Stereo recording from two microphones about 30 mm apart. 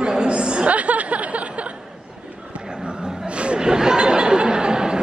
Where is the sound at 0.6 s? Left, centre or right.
Right.